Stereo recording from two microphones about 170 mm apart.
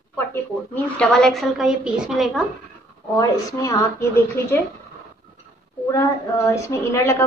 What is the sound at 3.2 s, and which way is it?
A woman's voice, 15° left (ahead or behind).